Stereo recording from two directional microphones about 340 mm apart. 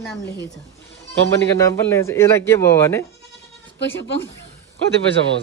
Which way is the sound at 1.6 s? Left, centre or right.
Centre.